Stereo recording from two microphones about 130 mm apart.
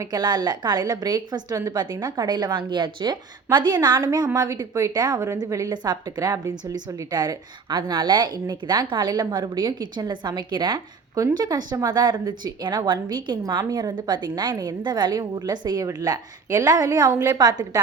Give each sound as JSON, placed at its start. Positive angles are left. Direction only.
{"t": 0.0, "sound": "a woman's voice", "side_deg": -35}